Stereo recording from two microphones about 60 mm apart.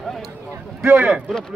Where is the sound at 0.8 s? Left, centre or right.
Right.